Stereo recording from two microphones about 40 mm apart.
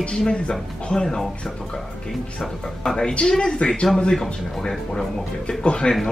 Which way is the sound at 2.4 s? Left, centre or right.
Centre.